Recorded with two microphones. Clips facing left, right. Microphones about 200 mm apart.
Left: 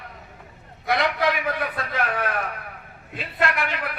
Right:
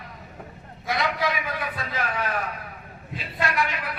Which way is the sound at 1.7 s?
60° left (ahead or behind).